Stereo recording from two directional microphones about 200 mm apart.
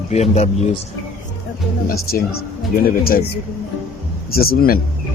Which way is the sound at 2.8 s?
45° left (ahead or behind).